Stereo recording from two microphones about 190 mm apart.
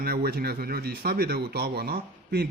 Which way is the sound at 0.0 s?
50° right (ahead or behind).